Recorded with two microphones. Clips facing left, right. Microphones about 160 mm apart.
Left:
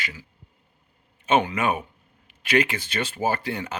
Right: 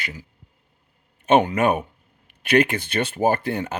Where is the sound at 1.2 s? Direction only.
45° right (ahead or behind).